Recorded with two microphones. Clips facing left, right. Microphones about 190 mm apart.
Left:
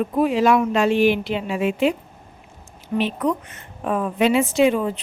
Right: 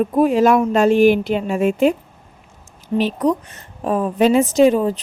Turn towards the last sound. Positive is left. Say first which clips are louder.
# right 4 dB
turn(degrees=-40)  # may be behind; listen again after turning